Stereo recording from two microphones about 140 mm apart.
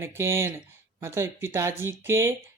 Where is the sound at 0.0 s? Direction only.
20° right (ahead or behind).